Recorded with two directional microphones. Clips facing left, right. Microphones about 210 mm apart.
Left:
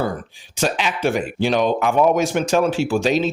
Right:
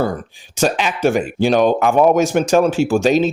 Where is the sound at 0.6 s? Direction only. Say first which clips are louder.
Right 4 dB; 45° right (ahead or behind).